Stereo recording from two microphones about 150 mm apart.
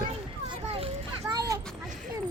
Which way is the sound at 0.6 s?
40° right (ahead or behind).